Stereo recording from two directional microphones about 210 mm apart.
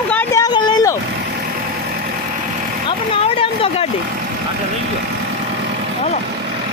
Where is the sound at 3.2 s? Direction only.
25° left (ahead or behind).